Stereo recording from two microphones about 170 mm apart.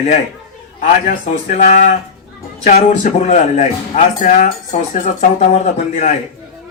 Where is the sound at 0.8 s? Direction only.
50° left (ahead or behind).